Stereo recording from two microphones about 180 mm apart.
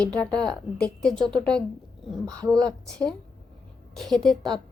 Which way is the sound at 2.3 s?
20° right (ahead or behind).